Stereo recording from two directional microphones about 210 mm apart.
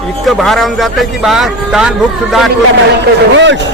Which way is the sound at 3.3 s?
60° right (ahead or behind).